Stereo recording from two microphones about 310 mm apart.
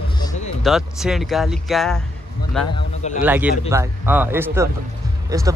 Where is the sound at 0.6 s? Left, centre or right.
Centre.